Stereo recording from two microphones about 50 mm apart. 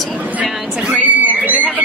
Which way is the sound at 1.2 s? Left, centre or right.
Right.